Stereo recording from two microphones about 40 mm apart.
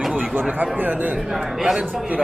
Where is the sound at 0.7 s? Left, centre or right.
Right.